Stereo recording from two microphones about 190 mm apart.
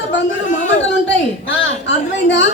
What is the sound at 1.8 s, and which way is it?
Speech, 70° left (ahead or behind).